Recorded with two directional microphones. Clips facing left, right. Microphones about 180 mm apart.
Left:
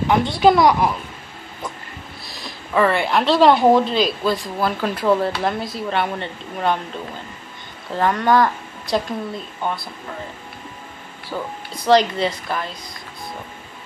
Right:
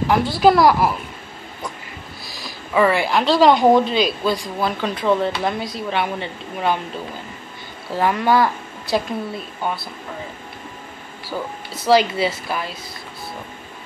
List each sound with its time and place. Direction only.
0.1 s a woman's voice: 5° right (ahead or behind)
2.2 s a woman's voice: centre (ahead or behind)
7.9 s a woman's voice: 5° right (ahead or behind)
11.2 s a woman's voice: 5° right (ahead or behind)